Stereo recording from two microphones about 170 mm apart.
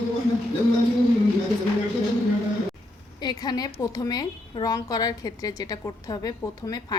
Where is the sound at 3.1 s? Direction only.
25° left (ahead or behind).